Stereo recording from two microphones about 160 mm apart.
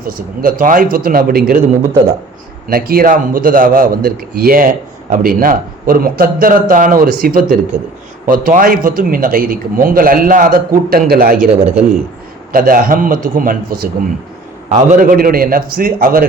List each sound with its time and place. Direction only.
0.0 s a man's voice: 65° right (ahead or behind)
2.6 s a man's voice: 65° right (ahead or behind)
12.5 s a man's voice: 60° right (ahead or behind)
14.7 s a man's voice: 50° right (ahead or behind)